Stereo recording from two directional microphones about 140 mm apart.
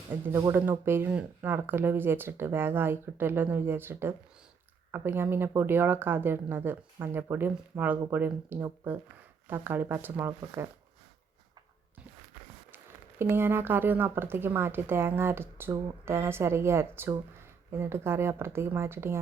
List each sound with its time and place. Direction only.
0.3 s speech: 25° right (ahead or behind)
12.7 s speech: 15° right (ahead or behind)